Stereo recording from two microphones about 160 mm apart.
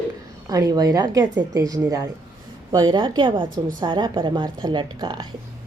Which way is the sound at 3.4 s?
60° right (ahead or behind).